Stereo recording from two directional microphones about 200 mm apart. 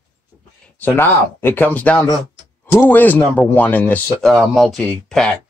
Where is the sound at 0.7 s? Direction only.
10° left (ahead or behind).